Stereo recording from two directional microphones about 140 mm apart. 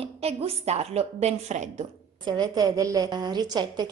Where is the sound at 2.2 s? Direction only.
30° right (ahead or behind).